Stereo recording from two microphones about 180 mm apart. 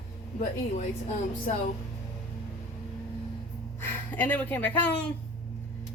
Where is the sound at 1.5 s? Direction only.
45° left (ahead or behind).